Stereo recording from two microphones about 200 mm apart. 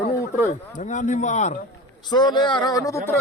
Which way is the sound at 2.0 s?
20° left (ahead or behind).